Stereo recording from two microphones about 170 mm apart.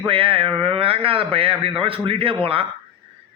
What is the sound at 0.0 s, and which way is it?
A man's voice, 30° right (ahead or behind).